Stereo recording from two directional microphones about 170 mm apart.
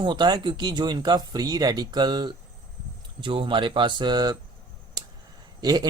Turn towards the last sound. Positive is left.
turn(degrees=-25)  # may be behind; listen again after turning